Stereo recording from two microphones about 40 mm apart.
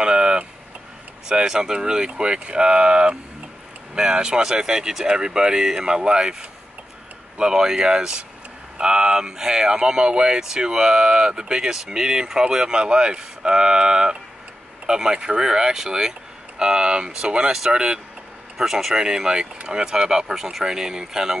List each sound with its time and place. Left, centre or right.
0.0 s tick-tock: right
1.3 s speech: centre
7.3 s speech: centre
18.6 s speech: centre